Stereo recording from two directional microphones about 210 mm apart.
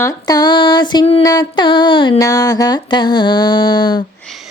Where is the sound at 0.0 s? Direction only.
15° left (ahead or behind).